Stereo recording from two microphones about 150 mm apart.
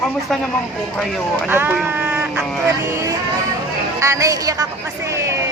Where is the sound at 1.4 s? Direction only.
15° right (ahead or behind).